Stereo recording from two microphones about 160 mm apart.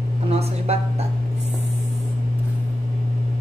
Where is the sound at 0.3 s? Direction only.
40° right (ahead or behind).